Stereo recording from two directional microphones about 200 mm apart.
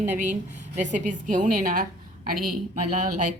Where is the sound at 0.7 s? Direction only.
35° right (ahead or behind).